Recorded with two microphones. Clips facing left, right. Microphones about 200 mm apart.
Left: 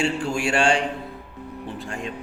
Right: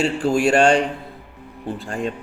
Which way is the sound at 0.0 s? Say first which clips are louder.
Right 5 dB; 35° right (ahead or behind).